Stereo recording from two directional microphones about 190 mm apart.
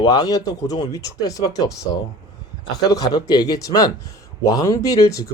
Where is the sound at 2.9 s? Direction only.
20° left (ahead or behind).